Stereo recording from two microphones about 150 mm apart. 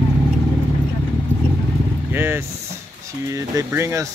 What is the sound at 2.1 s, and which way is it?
Vehicle, 15° right (ahead or behind).